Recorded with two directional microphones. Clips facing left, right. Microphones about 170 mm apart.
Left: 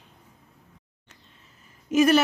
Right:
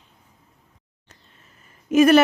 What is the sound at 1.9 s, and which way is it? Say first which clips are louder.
Speech: right 5 dB; 55° right (ahead or behind).